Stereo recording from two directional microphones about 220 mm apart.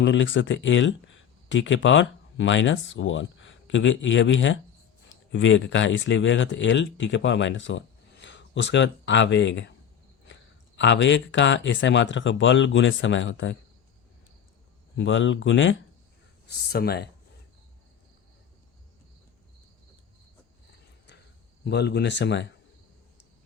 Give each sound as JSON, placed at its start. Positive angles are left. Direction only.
{"t": 0.0, "sound": "speech", "side_deg": 60}
{"t": 10.8, "sound": "speech", "side_deg": 55}
{"t": 14.9, "sound": "speech", "side_deg": 60}
{"t": 16.5, "sound": "speech", "side_deg": 45}
{"t": 21.6, "sound": "speech", "side_deg": 50}